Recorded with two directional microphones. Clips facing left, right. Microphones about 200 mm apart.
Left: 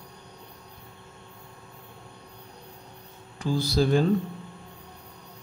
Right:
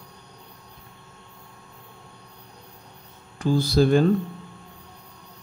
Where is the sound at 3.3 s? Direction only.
55° right (ahead or behind).